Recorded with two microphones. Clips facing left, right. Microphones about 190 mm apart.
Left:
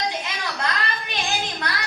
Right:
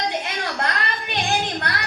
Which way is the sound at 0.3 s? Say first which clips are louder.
Right 2 dB; 50° right (ahead or behind).